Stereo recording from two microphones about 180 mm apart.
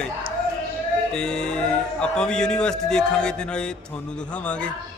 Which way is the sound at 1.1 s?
5° left (ahead or behind).